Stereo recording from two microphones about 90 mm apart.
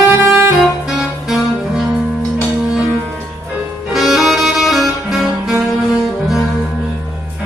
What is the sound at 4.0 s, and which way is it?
Music, centre (ahead or behind).